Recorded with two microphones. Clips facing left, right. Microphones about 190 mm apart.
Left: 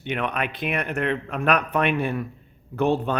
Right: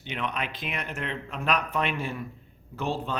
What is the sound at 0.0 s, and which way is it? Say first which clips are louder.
Speech: left 6 dB; 60° left (ahead or behind).